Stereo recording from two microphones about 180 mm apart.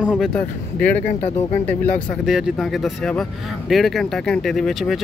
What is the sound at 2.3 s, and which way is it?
Speech, centre (ahead or behind).